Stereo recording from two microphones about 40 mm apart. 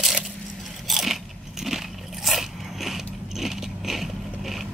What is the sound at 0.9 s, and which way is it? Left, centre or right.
Biting, centre.